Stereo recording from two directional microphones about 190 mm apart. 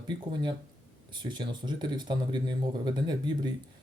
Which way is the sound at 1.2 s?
25° right (ahead or behind).